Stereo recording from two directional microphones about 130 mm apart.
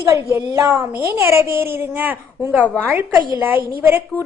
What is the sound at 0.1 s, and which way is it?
A woman's voice, 20° right (ahead or behind).